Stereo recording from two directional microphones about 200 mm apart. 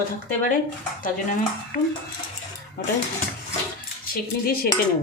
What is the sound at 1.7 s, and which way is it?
Speech, 40° left (ahead or behind).